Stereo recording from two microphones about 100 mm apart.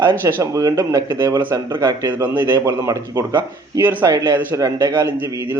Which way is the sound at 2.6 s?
30° right (ahead or behind).